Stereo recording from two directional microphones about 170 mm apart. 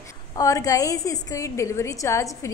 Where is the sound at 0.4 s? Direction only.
20° left (ahead or behind).